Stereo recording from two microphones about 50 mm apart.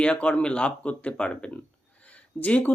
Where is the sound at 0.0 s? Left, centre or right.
Left.